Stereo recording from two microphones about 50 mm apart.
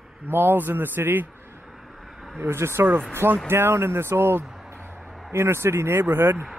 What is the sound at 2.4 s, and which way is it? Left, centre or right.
Speech, right.